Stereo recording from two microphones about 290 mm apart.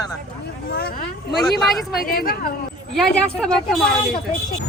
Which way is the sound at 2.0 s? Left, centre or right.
Left.